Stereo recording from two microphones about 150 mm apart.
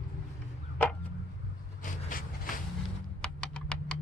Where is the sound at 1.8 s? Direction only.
65° left (ahead or behind).